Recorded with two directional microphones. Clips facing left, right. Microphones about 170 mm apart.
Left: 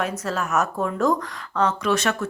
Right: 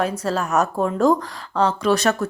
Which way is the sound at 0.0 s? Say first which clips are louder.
Right 4 dB; 30° right (ahead or behind).